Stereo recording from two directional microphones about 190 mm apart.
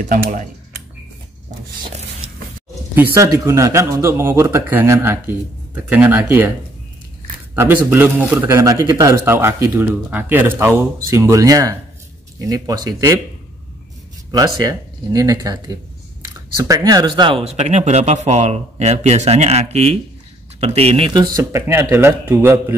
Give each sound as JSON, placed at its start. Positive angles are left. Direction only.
{"t": 0.1, "sound": "speech", "side_deg": -45}
{"t": 2.9, "sound": "a man's voice", "side_deg": -10}
{"t": 7.5, "sound": "a man's voice", "side_deg": -10}
{"t": 14.3, "sound": "a man's voice", "side_deg": -20}